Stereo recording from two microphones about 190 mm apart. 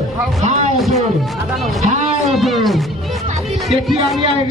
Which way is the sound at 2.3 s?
Centre (ahead or behind).